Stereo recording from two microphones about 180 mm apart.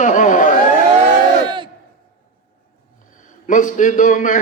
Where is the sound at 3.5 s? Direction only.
45° left (ahead or behind).